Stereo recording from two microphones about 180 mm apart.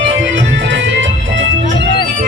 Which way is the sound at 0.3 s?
85° right.